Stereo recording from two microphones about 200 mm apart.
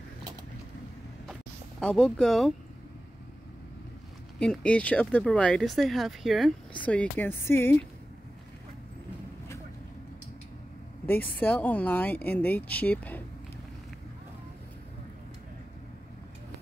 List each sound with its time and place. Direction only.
1.8 s speech: 5° left (ahead or behind)
4.4 s speech: 5° left (ahead or behind)
11.1 s speech: 10° left (ahead or behind)